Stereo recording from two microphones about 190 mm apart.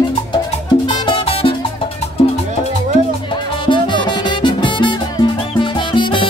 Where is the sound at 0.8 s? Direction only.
25° left (ahead or behind).